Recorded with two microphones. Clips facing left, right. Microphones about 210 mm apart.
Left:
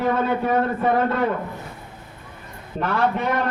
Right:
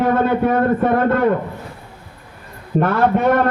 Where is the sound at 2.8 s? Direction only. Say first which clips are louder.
Right 6 dB; 50° right (ahead or behind).